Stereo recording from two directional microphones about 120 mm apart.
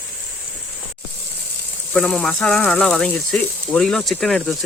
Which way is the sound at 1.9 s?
5° left (ahead or behind).